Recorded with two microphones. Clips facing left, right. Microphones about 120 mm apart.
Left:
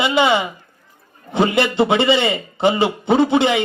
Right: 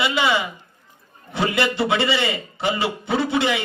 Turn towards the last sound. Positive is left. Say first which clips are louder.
# left 6 dB
turn(degrees=25)  # may be behind; listen again after turning